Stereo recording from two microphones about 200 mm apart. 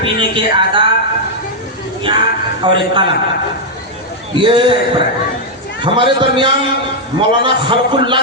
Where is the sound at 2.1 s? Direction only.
25° right (ahead or behind).